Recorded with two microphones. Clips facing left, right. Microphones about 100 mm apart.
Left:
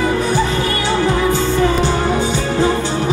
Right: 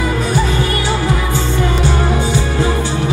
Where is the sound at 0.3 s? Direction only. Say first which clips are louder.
Even; 20° right (ahead or behind).